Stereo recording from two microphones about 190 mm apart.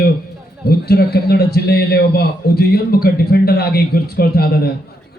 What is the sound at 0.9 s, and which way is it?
A man's voice, 55° left (ahead or behind).